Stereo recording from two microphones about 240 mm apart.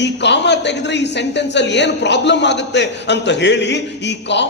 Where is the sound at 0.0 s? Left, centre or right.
Left.